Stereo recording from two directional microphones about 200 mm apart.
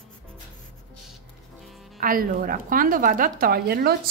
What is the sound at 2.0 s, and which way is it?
A woman's voice, 45° right (ahead or behind).